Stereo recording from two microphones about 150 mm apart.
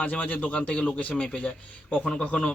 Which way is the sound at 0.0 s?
10° left (ahead or behind).